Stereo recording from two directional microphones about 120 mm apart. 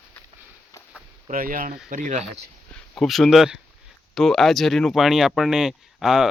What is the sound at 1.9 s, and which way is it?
Speech, 90° right.